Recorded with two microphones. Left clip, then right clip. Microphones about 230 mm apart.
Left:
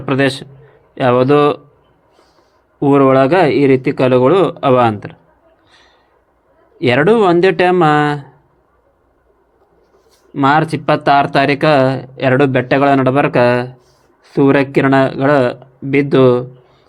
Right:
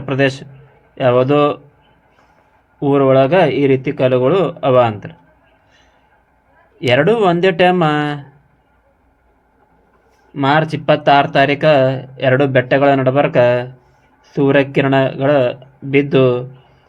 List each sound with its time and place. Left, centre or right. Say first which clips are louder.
0.0 s a man's voice: left 1 dB; left
2.8 s speech: left 2 dB; left
6.7 s speech: left 2 dB; left
10.3 s speech: left 2 dB; left